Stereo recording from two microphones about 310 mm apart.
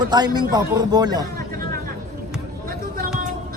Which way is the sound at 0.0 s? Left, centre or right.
Centre.